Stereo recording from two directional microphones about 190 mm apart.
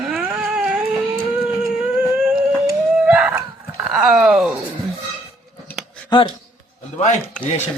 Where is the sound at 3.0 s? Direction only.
5° right (ahead or behind).